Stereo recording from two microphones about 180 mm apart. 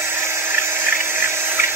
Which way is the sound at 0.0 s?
15° right (ahead or behind).